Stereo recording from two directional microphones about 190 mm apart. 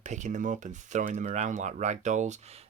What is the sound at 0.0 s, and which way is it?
Speech, 40° right (ahead or behind).